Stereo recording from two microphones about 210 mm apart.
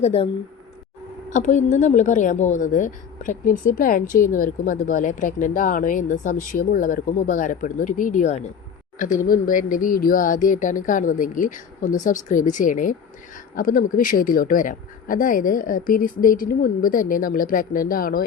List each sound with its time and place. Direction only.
0.0 s speech: 30° left (ahead or behind)
1.3 s a woman's voice: 35° left (ahead or behind)